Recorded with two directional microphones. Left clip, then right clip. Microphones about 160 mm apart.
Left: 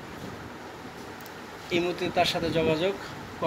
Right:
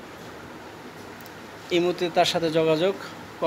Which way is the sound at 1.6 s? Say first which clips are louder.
Right 4 dB; 45° right (ahead or behind).